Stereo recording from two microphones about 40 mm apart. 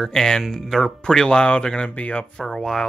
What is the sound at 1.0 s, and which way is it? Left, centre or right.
Speech, left.